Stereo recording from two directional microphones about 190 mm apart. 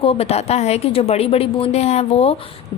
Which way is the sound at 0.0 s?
30° left (ahead or behind).